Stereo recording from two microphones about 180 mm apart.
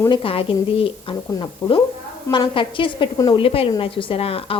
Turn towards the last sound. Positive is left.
turn(degrees=30)  # may be behind; listen again after turning